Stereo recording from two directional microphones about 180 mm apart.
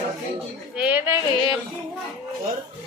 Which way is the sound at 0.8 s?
10° right (ahead or behind).